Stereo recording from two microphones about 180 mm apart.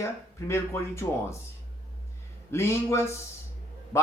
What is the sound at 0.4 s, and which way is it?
Speech, 15° left (ahead or behind).